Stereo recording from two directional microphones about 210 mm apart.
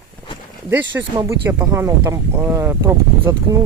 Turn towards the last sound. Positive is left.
turn(degrees=-10)  # may be behind; listen again after turning